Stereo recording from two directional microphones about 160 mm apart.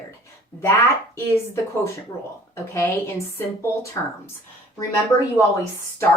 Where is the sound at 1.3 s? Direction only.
15° left (ahead or behind).